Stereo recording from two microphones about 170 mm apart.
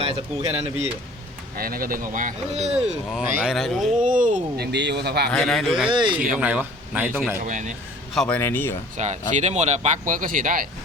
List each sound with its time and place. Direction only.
0.0 s speech: 35° right (ahead or behind)
1.5 s speech: 60° right (ahead or behind); by 2.9 s 40° right (ahead or behind)
3.1 s speech: centre (ahead or behind)
4.1 s speech: 50° right (ahead or behind); by 5.3 s 75° right (ahead or behind)
5.3 s speech: 5° left (ahead or behind)
5.9 s speech: 30° right (ahead or behind)
6.4 s speech: 10° right (ahead or behind)
7.4 s speech: 45° right (ahead or behind)
8.1 s a man's voice: centre (ahead or behind)
8.4 s speech: 15° left (ahead or behind)
9.0 s speech: 45° right (ahead or behind)